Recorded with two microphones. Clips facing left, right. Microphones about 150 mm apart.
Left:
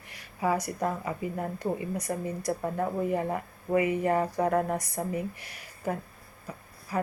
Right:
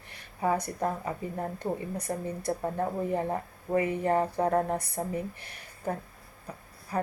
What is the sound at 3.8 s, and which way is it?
Speech, 10° left (ahead or behind).